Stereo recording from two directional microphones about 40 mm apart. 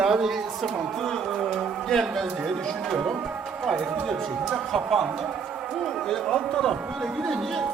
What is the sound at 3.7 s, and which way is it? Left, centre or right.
Speech, centre.